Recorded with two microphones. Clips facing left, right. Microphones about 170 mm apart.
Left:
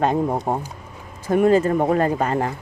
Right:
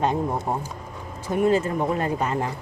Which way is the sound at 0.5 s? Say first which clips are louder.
Left 3 dB; 50° left (ahead or behind).